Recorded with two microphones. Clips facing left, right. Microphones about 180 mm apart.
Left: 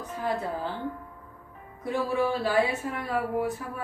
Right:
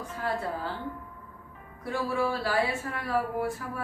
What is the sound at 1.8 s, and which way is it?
Speech, 20° left (ahead or behind).